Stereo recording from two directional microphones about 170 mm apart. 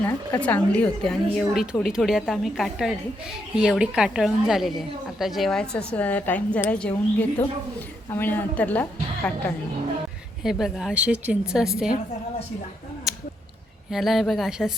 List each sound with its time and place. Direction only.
0.0 s a woman's voice: 10° left (ahead or behind)
10.4 s a woman's voice: centre (ahead or behind)
13.1 s a sound: centre (ahead or behind)
13.9 s a woman's voice: centre (ahead or behind)